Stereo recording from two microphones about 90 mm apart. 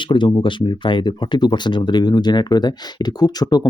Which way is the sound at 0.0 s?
60° left (ahead or behind).